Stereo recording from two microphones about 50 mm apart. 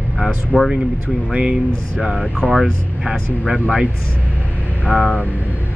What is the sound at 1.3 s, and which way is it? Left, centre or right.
Speech, right.